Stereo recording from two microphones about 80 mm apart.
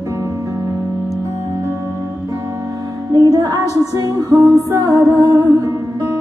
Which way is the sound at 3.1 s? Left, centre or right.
Right.